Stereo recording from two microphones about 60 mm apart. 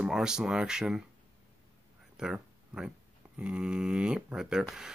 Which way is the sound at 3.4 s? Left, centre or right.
Centre.